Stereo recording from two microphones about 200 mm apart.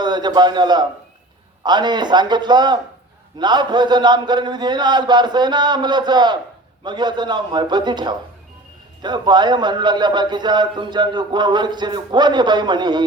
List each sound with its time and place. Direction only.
0.0 s a man's voice: 20° right (ahead or behind)